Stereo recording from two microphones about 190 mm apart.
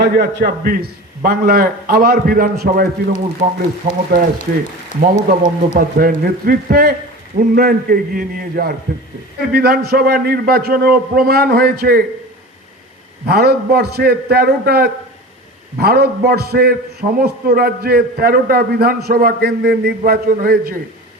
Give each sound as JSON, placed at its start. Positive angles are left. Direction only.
{"t": 0.0, "sound": "a man's voice", "side_deg": -60}
{"t": 13.2, "sound": "a man's voice", "side_deg": -55}